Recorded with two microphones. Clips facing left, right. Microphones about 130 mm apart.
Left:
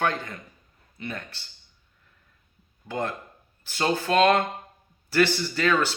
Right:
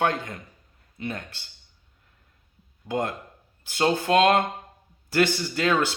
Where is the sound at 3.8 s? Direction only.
20° right (ahead or behind).